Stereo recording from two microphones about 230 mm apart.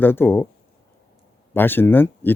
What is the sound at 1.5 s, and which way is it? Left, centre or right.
Speech, centre.